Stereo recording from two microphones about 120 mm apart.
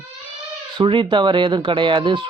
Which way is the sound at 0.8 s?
45° right (ahead or behind).